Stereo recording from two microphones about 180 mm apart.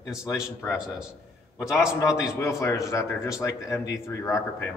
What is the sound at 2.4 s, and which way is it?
A man's voice, 15° left (ahead or behind).